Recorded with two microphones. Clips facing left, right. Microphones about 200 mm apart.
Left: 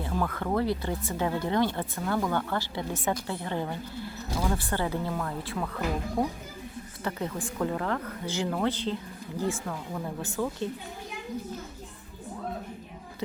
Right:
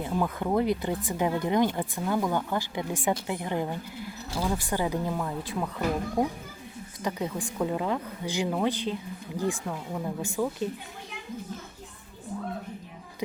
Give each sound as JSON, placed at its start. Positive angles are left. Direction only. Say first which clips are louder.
{"t": 0.0, "sound": "speech", "louder": "right 2 dB", "side_deg": -15}